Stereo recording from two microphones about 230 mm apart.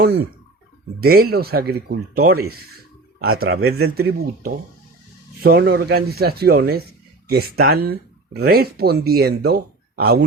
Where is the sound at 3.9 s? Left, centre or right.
Right.